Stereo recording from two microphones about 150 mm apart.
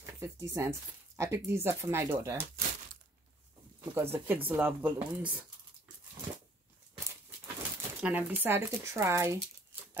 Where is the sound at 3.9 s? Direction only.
15° right (ahead or behind).